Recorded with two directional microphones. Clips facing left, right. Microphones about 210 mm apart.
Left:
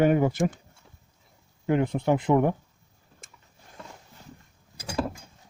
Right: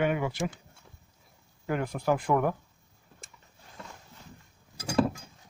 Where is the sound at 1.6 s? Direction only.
25° left (ahead or behind).